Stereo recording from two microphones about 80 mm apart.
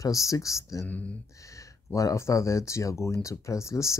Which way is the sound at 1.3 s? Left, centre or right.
Left.